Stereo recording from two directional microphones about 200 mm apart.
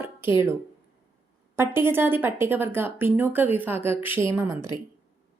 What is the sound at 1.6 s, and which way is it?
Speech, 10° right (ahead or behind).